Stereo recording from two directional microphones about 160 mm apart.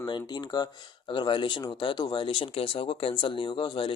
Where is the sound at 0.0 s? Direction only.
25° left (ahead or behind).